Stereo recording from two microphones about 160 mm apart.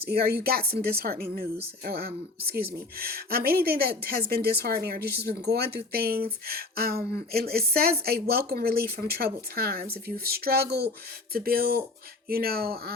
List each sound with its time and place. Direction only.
0.0 s speech: 75° right (ahead or behind)
11.3 s speech: 70° right (ahead or behind)